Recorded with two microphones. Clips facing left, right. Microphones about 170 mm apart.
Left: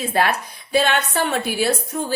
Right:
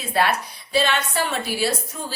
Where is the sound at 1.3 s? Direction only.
55° left (ahead or behind).